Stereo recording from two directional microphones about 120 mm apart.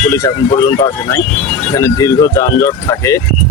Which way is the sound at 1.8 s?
30° left (ahead or behind).